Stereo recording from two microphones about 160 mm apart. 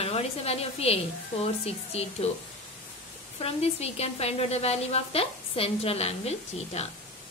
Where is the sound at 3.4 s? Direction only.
40° left (ahead or behind).